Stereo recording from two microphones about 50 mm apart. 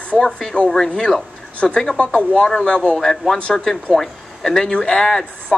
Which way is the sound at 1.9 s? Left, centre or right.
Left.